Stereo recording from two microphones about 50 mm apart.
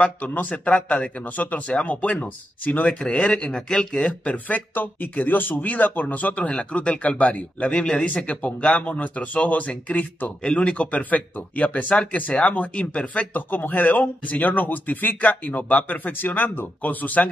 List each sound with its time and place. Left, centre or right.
0.0 s speech: left
2.9 s speech: centre; by 17.3 s left